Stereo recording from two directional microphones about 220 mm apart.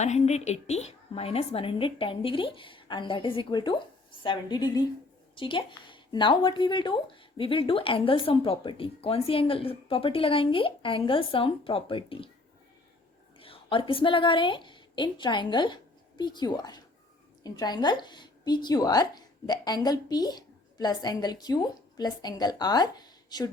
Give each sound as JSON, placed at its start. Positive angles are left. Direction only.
{"t": 0.0, "sound": "speech", "side_deg": 30}
{"t": 13.4, "sound": "a woman's voice", "side_deg": 25}